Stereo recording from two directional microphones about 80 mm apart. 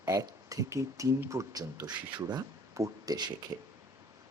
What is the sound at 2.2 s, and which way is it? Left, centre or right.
Speech, right.